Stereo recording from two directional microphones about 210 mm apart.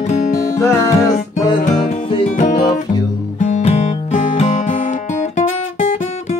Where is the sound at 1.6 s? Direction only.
35° left (ahead or behind).